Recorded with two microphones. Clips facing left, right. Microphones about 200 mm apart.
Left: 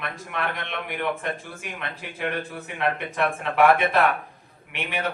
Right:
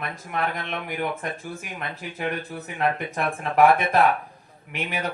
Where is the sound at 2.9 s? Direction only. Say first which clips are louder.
Left 2 dB; 40° right (ahead or behind).